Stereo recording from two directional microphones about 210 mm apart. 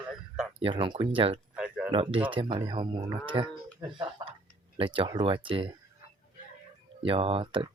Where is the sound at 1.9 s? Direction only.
25° right (ahead or behind).